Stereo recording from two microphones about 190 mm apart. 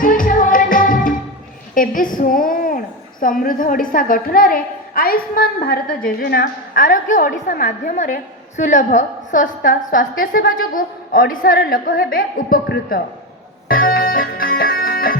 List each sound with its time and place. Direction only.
0.0 s music: 45° left (ahead or behind)
1.7 s a woman's voice: 45° left (ahead or behind)
13.7 s organ: 50° left (ahead or behind)